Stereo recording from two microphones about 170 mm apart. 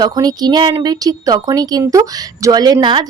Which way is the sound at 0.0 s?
25° right (ahead or behind).